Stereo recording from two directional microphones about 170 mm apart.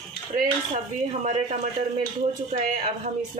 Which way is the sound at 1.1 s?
45° right (ahead or behind).